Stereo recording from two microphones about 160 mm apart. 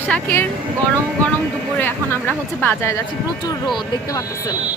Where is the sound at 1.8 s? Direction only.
15° left (ahead or behind).